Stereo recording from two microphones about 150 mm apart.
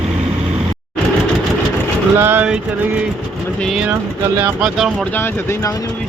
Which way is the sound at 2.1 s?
15° right (ahead or behind).